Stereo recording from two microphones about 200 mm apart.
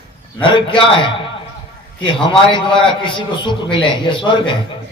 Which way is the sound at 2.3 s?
25° left (ahead or behind).